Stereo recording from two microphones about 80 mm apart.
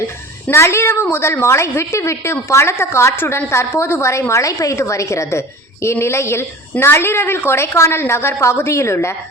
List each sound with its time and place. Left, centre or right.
0.5 s a woman's voice: left